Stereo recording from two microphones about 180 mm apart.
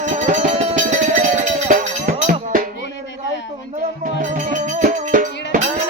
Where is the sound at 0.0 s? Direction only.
45° right (ahead or behind).